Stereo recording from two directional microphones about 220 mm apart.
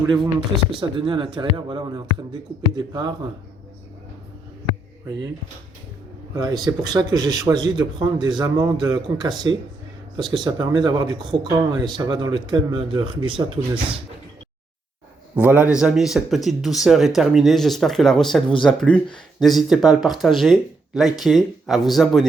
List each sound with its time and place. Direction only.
0.0 s speech: 20° right (ahead or behind)
6.3 s speech: 15° right (ahead or behind)
15.4 s speech: 5° right (ahead or behind)